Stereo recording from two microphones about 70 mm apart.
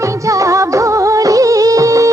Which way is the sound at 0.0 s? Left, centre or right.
Right.